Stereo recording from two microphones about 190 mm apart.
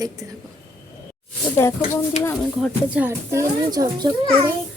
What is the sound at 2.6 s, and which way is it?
Speech, 10° right (ahead or behind).